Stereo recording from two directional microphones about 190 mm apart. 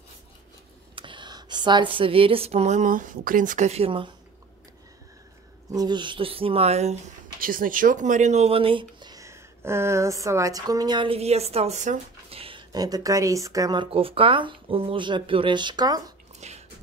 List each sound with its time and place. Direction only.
0.9 s speech: 25° right (ahead or behind)
5.7 s speech: 20° right (ahead or behind)
16.3 s drip: 35° right (ahead or behind)